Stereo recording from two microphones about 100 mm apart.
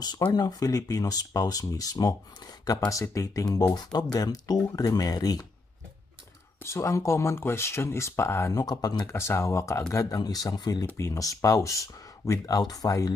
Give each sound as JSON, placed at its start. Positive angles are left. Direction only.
{"t": 0.3, "sound": "speech", "side_deg": 40}
{"t": 6.6, "sound": "speech", "side_deg": 25}
{"t": 9.1, "sound": "speech", "side_deg": 25}
{"t": 10.8, "sound": "speech", "side_deg": 30}